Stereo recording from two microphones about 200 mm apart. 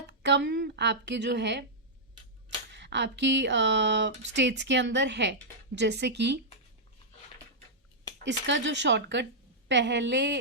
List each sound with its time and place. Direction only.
0.1 s speech: 60° right (ahead or behind)
2.7 s speech: 60° right (ahead or behind)
8.2 s speech: 65° right (ahead or behind)